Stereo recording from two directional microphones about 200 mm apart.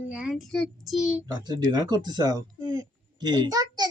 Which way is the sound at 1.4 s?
20° right (ahead or behind).